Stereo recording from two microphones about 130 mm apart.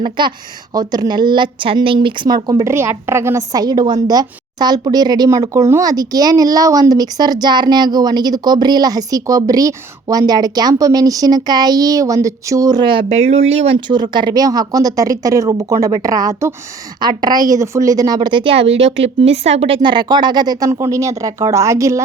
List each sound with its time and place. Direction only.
0.0 s a woman's voice: 35° right (ahead or behind); by 13.7 s 50° right (ahead or behind)
13.7 s a woman's voice: 35° right (ahead or behind)